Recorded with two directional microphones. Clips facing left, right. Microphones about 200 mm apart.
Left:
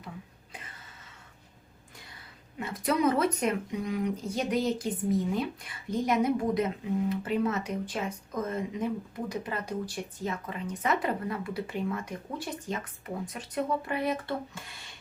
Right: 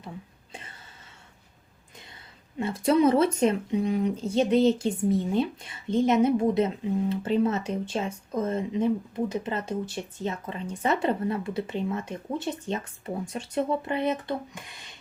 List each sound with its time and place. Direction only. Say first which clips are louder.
2.6 s speech: right 6 dB; 30° right (ahead or behind)